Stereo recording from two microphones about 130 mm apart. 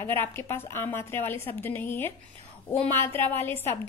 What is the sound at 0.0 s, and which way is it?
A woman's voice, 20° left (ahead or behind).